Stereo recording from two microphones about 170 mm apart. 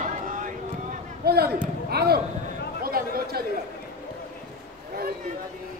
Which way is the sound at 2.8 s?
60° right (ahead or behind).